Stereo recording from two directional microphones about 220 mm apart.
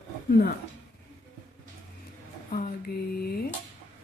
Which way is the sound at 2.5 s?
40° left (ahead or behind).